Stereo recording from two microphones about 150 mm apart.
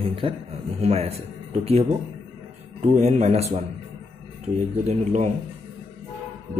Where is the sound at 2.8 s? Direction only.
50° right (ahead or behind).